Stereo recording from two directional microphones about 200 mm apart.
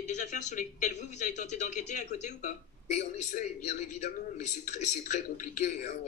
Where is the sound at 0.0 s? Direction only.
35° left (ahead or behind).